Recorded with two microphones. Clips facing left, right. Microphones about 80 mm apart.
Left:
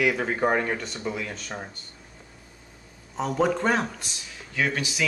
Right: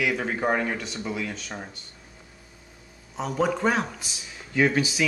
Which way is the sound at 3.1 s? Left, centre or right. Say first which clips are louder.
Left 1 dB; centre.